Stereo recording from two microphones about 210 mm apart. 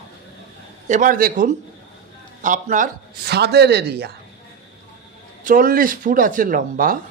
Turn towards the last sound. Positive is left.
turn(degrees=-40)  # may be behind; listen again after turning